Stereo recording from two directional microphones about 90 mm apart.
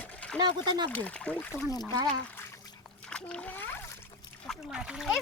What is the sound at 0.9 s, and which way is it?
Speech, 15° left (ahead or behind).